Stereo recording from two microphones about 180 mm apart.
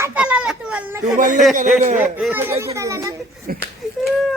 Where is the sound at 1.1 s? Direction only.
45° right (ahead or behind).